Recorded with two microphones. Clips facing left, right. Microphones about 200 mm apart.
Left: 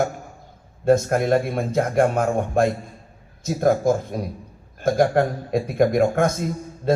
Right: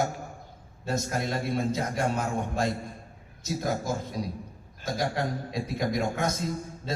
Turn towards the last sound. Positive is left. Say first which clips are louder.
# left 9 dB
turn(degrees=55)  # may be behind; listen again after turning